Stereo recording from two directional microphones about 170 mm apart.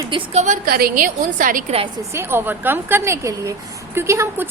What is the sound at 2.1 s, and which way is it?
A woman's voice, 15° right (ahead or behind).